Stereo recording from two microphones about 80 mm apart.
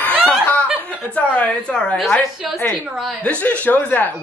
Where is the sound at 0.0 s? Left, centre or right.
Left.